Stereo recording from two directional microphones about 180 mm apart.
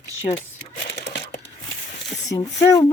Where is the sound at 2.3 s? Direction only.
15° left (ahead or behind).